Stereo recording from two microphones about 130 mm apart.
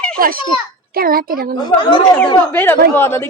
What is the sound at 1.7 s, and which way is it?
Speech, 35° left (ahead or behind).